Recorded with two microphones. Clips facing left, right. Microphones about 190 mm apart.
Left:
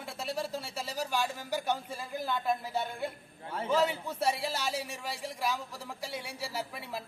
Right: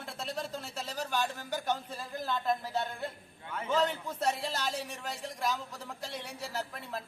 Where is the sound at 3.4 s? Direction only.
30° left (ahead or behind).